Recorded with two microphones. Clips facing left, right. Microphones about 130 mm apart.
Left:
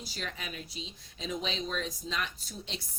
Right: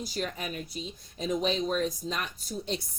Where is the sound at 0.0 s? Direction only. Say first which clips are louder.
Right 7 dB; 45° right (ahead or behind).